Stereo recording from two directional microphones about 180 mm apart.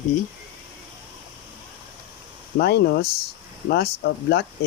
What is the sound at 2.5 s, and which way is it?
Speech, 65° left (ahead or behind).